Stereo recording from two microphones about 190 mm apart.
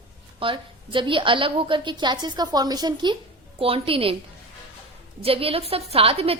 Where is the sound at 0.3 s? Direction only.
25° right (ahead or behind).